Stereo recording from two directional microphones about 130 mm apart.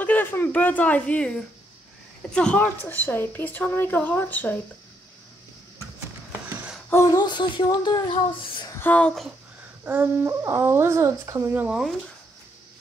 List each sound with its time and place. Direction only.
0.0 s a woman's voice: 15° left (ahead or behind)
6.9 s speech: 20° left (ahead or behind)
7.2 s speech: 35° left (ahead or behind)
8.7 s speech: 10° left (ahead or behind)
9.8 s speech: 15° right (ahead or behind)